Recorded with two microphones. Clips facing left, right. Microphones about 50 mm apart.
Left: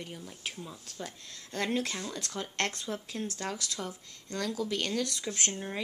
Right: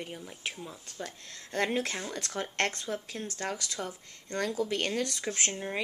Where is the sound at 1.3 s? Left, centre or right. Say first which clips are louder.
Right 2 dB; right.